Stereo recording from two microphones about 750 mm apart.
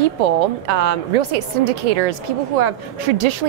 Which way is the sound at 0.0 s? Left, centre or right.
Right.